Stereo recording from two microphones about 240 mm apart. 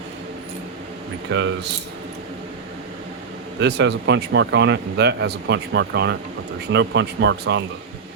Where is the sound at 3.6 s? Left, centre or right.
Right.